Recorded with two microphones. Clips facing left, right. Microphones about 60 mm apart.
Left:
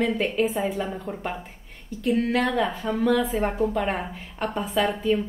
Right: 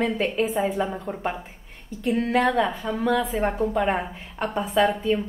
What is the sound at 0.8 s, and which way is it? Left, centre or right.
A woman's voice, centre.